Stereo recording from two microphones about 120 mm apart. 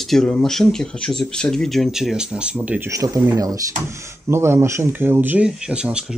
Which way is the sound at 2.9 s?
30° right (ahead or behind).